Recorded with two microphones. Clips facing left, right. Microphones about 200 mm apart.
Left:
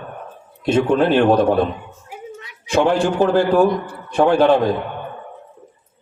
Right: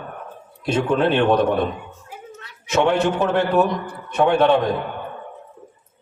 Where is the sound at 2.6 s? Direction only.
30° left (ahead or behind).